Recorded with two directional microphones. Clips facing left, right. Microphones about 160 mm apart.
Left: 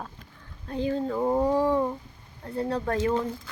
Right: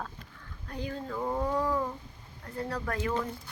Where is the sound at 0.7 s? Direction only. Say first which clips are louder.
Left 9 dB; 25° left (ahead or behind).